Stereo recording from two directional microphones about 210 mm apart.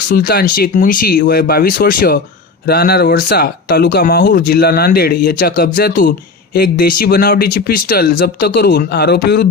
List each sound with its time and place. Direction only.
0.1 s speech: 45° left (ahead or behind)